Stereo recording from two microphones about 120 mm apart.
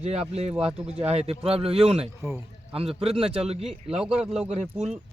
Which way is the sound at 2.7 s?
55° right (ahead or behind).